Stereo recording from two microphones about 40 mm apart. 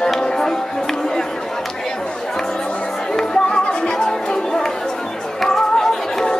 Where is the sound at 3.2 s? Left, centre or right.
Centre.